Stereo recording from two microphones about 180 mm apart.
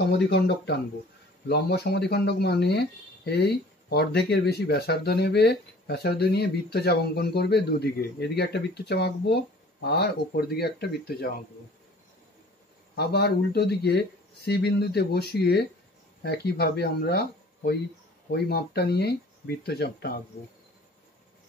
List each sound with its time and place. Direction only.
0.0 s speech: 70° left (ahead or behind)
12.9 s speech: 65° left (ahead or behind)